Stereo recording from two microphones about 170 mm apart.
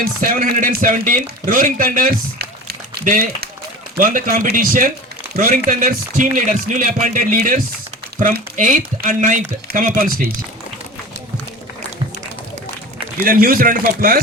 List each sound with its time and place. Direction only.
0.0 s a man's voice: 60° right (ahead or behind)
13.2 s speech: 55° right (ahead or behind)